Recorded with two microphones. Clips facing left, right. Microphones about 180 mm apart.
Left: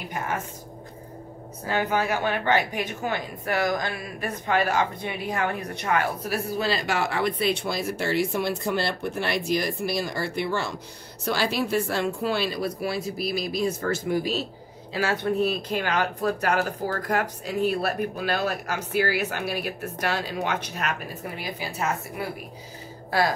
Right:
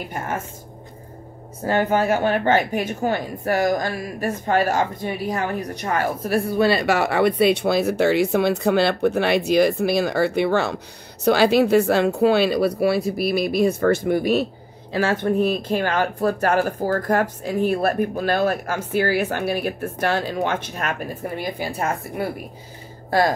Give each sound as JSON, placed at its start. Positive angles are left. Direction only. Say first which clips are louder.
{"t": 1.6, "sound": "speech", "louder": "right 6 dB", "side_deg": -50}